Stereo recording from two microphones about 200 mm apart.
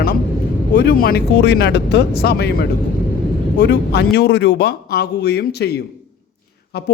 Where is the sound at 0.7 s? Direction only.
55° left (ahead or behind).